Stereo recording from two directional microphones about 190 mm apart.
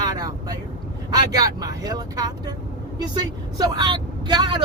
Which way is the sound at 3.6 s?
20° right (ahead or behind).